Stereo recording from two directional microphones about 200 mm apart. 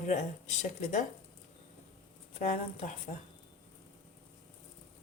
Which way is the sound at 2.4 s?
35° left (ahead or behind).